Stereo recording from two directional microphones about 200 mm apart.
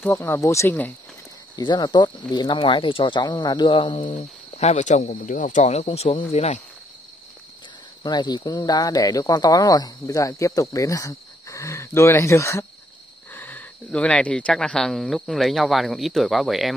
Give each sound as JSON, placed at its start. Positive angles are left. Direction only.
{"t": 0.0, "sound": "speech", "side_deg": 10}
{"t": 1.6, "sound": "speech", "side_deg": 20}
{"t": 8.0, "sound": "speech", "side_deg": 20}